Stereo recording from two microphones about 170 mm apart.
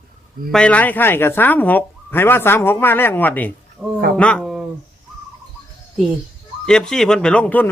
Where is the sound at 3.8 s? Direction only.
5° right (ahead or behind).